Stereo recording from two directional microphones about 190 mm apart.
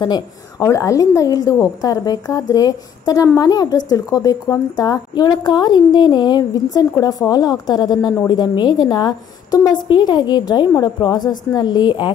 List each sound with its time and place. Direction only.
0.0 s a woman's voice: 20° left (ahead or behind)